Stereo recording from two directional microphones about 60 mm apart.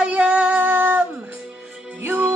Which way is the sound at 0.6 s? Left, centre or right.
Right.